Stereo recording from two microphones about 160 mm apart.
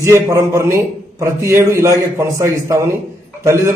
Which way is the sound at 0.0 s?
20° right (ahead or behind).